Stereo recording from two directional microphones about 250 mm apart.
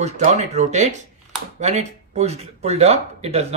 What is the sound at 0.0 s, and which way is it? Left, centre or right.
A man's voice, right.